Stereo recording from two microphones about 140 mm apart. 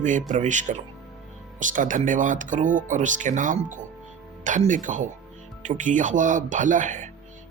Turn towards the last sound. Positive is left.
turn(degrees=-65)  # may be behind; listen again after turning